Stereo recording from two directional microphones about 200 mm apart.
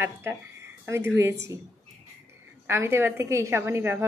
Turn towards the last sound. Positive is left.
turn(degrees=-10)  # may be behind; listen again after turning